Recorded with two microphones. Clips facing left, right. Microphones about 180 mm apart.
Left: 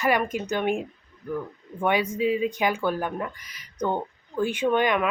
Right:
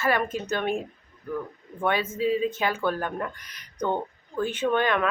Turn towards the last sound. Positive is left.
turn(degrees=15)  # may be behind; listen again after turning